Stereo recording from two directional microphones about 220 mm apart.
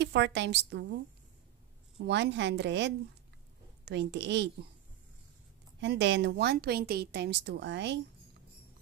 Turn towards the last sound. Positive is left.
turn(degrees=-50)  # may be behind; listen again after turning